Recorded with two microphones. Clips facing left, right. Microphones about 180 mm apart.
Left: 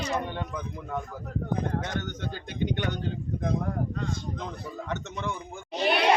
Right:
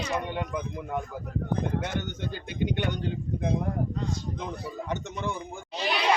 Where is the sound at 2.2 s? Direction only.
10° right (ahead or behind).